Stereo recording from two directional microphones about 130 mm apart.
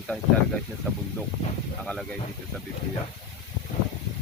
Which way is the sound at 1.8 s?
10° left (ahead or behind).